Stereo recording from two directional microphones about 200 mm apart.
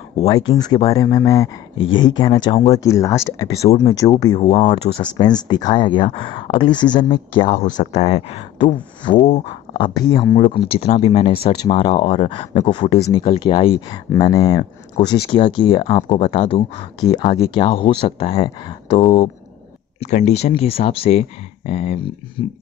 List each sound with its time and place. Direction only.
0.3 s speech: 20° left (ahead or behind)
2.7 s speech: 15° left (ahead or behind)
4.4 s speech: 30° left (ahead or behind)
7.4 s speech: 40° left (ahead or behind)
20.2 s speech: 35° left (ahead or behind)